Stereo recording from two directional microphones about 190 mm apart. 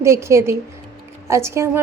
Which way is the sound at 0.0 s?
15° right (ahead or behind).